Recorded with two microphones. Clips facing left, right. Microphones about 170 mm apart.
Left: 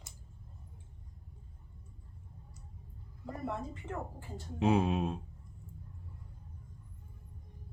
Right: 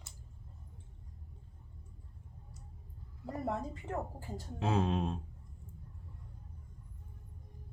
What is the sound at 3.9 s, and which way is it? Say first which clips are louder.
Speech: right 3 dB; 40° right (ahead or behind).